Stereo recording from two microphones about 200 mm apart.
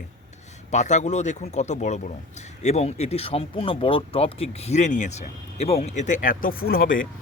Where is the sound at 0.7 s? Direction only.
35° left (ahead or behind).